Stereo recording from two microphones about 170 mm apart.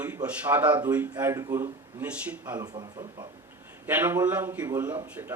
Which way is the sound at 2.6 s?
25° right (ahead or behind).